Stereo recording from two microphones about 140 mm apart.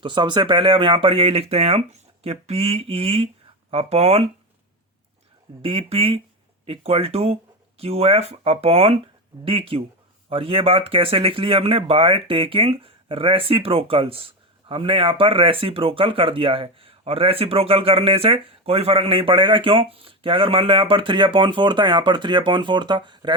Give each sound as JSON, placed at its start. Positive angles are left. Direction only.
{"t": 0.0, "sound": "speech", "side_deg": -35}
{"t": 5.6, "sound": "speech", "side_deg": -40}